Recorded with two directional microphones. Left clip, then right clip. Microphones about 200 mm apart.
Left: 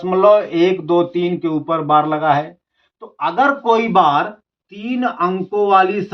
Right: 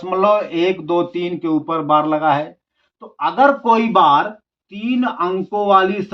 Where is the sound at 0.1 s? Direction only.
20° right (ahead or behind).